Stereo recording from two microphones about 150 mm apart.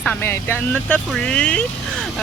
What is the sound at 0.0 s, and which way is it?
Speech, 10° left (ahead or behind).